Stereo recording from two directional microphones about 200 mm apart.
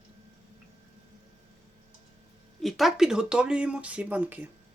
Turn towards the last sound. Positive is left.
turn(degrees=-10)  # may be behind; listen again after turning